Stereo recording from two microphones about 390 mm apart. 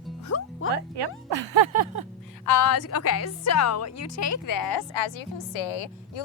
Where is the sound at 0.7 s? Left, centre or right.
Right.